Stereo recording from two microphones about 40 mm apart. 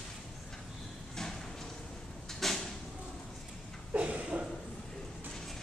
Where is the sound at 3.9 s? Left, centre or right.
Right.